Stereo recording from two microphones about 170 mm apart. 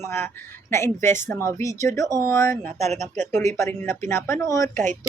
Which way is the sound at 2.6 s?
40° right (ahead or behind).